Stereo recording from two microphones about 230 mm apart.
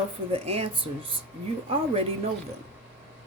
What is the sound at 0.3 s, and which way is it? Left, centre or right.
Speech, right.